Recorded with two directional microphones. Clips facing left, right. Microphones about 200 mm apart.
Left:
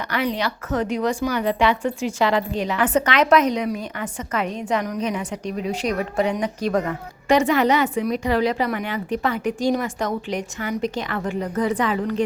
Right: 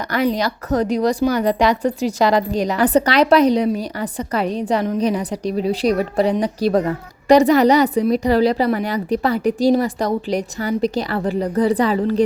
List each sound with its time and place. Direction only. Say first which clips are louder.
0.1 s a woman's voice: right 5 dB; 40° right (ahead or behind)